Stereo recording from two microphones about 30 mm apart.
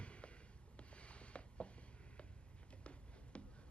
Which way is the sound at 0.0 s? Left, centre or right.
Left.